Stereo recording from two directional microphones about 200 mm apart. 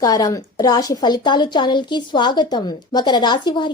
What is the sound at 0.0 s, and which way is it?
A woman's voice, 20° left (ahead or behind).